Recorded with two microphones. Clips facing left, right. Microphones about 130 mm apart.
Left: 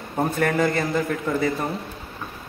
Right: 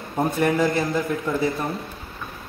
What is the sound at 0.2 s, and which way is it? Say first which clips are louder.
Speech: right 1 dB; 5° right (ahead or behind).